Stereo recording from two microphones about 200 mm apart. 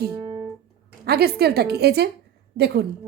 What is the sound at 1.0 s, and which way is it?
A woman's voice, 55° right (ahead or behind).